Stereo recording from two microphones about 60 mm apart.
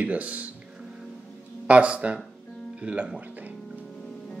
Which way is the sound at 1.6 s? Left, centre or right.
Right.